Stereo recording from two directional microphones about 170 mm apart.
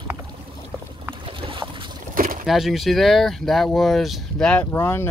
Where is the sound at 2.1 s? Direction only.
55° right (ahead or behind).